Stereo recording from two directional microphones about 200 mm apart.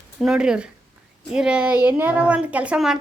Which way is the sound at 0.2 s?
Centre (ahead or behind).